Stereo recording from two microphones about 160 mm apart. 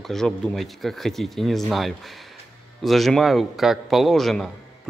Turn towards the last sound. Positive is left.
turn(degrees=0)  # may be behind; listen again after turning